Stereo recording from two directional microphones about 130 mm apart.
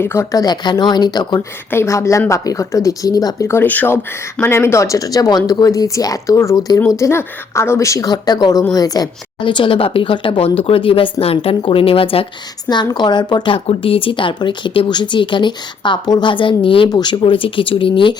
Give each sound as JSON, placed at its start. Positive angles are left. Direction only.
{"t": 0.0, "sound": "a woman's voice", "side_deg": 20}
{"t": 1.7, "sound": "a woman's voice", "side_deg": 20}
{"t": 12.6, "sound": "a woman's voice", "side_deg": 35}